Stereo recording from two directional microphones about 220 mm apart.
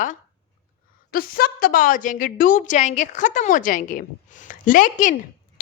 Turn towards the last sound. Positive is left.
turn(degrees=35)  # may be behind; listen again after turning